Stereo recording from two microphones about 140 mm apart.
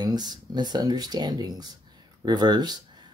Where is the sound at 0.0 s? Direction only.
30° right (ahead or behind).